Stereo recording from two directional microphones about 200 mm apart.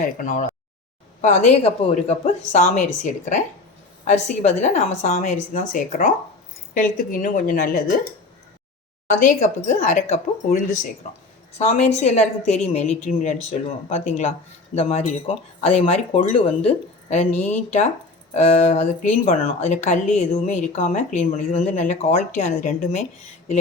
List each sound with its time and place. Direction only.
1.2 s a woman's voice: 35° left (ahead or behind)
9.0 s a woman's voice: 40° left (ahead or behind)